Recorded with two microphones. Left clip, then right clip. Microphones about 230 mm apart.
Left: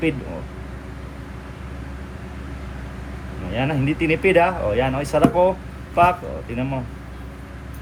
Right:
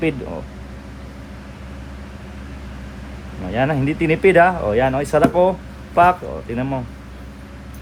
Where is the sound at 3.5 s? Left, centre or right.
Right.